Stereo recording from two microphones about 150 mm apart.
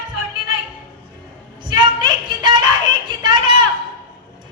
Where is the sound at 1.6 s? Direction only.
30° right (ahead or behind).